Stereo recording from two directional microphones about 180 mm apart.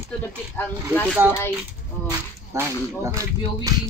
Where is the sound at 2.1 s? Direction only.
15° right (ahead or behind).